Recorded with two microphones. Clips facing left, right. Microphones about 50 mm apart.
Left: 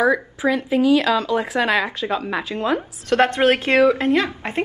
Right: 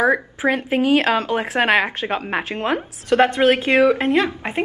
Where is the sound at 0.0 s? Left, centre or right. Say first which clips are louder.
Even; right.